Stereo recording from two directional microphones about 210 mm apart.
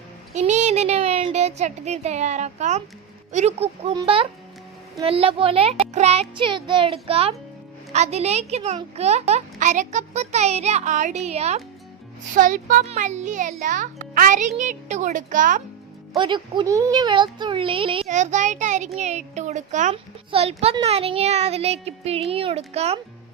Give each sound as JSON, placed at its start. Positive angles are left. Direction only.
{"t": 0.3, "sound": "a child's voice", "side_deg": -35}
{"t": 16.1, "sound": "a child's voice", "side_deg": -20}